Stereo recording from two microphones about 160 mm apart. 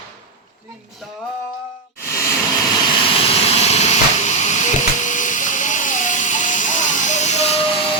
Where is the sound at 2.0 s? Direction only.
20° left (ahead or behind).